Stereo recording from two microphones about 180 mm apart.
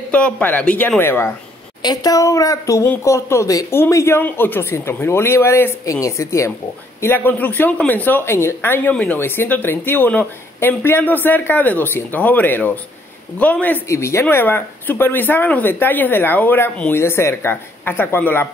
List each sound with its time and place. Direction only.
0.1 s a woman's voice: 10° left (ahead or behind)